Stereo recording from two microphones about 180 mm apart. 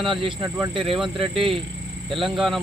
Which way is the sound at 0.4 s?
15° right (ahead or behind).